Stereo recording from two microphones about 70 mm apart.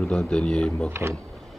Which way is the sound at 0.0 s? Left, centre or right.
Centre.